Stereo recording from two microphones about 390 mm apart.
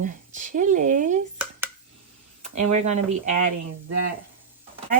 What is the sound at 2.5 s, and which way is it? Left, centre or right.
Speech, centre.